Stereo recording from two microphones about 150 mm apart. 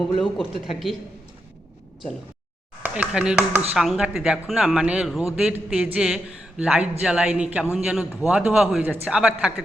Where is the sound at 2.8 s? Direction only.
10° right (ahead or behind).